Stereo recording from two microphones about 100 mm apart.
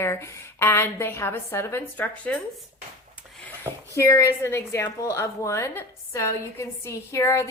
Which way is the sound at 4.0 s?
25° left (ahead or behind).